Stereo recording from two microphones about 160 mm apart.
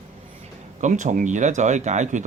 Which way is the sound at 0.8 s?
50° right (ahead or behind).